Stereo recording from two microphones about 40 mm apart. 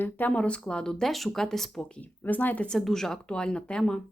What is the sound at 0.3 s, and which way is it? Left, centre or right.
Speech, left.